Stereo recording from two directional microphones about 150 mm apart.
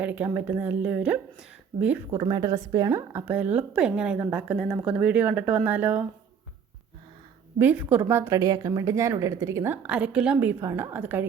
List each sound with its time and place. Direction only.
0.0 s a woman's voice: 10° right (ahead or behind)
2.0 s a woman's voice: 25° right (ahead or behind)
7.6 s a woman's voice: 10° right (ahead or behind)